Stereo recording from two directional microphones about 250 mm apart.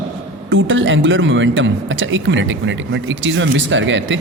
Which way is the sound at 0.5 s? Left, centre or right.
Right.